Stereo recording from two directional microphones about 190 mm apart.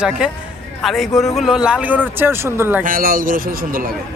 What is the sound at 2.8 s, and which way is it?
Speech, 50° right (ahead or behind).